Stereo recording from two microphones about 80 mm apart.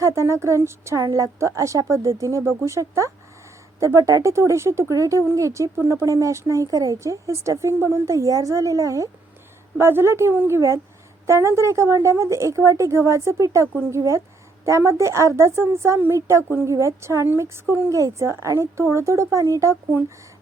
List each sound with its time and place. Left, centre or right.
0.0 s speech: right
9.7 s speech: right